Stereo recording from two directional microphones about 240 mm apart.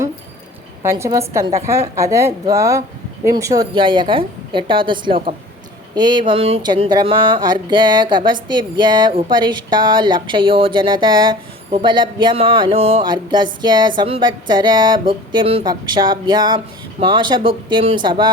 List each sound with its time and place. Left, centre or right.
0.8 s a woman's voice: centre